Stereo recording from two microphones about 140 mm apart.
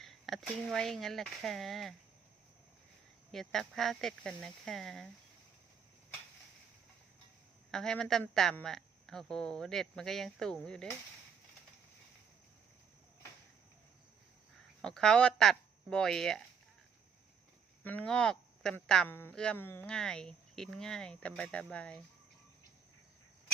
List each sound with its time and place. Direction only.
0.0 s a woman's voice: centre (ahead or behind)
3.3 s a woman's voice: centre (ahead or behind)
7.7 s a woman's voice: 5° left (ahead or behind)
14.8 s a woman's voice: 5° left (ahead or behind)
17.8 s speech: 10° left (ahead or behind)
19.0 s a woman's voice: 15° left (ahead or behind)